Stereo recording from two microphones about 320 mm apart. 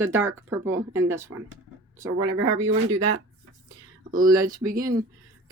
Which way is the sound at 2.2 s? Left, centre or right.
Right.